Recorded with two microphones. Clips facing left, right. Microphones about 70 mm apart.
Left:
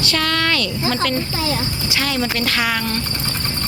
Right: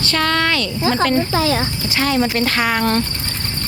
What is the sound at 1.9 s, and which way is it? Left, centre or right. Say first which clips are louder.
Speech: right 4 dB; right.